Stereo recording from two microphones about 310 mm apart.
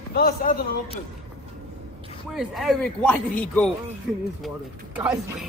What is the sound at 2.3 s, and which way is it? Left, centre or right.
Speech, centre.